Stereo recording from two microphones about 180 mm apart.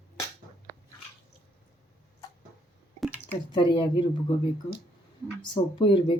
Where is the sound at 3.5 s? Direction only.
25° left (ahead or behind).